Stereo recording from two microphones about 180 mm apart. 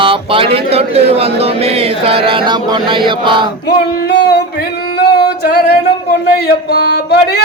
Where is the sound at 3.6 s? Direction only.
65° left (ahead or behind).